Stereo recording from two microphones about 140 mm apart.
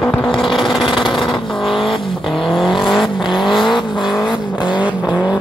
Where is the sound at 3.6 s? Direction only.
35° left (ahead or behind).